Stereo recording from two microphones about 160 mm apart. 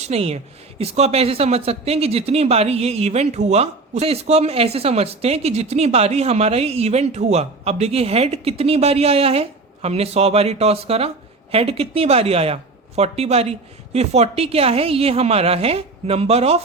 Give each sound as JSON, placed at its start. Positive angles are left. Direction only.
{"t": 0.0, "sound": "speech", "side_deg": -40}